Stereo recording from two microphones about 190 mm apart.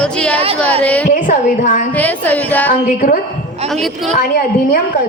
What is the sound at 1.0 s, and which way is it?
Speech, 45° left (ahead or behind).